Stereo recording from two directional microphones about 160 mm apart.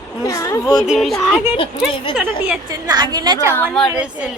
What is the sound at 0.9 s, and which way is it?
Speech, centre (ahead or behind).